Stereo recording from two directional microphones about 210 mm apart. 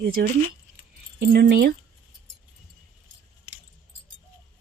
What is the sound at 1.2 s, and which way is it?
Speech, 50° right (ahead or behind).